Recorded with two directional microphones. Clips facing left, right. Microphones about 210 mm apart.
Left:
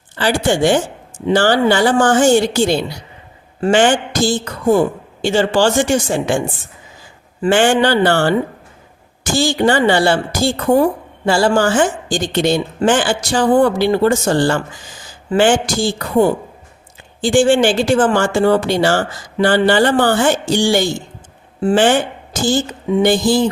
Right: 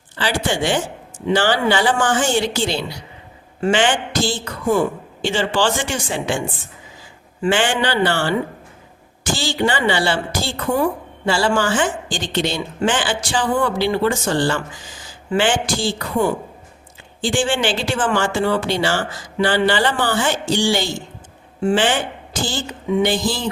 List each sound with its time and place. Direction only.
0.2 s speech: 45° left (ahead or behind)
7.4 s a woman's voice: 45° left (ahead or behind)